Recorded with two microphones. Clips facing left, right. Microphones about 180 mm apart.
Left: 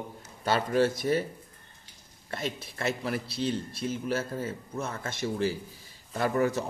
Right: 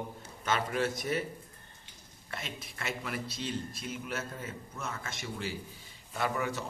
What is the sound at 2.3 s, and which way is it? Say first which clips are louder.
Speech: left 8 dB; 35° left (ahead or behind).